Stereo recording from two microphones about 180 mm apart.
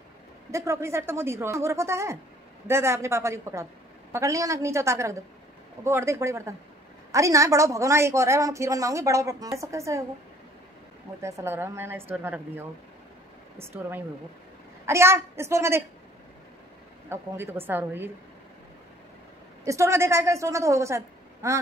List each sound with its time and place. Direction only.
0.5 s a woman's voice: 15° right (ahead or behind)
11.1 s a woman's voice: 15° right (ahead or behind)
17.1 s a woman's voice: 15° right (ahead or behind)
19.6 s a woman's voice: 15° right (ahead or behind)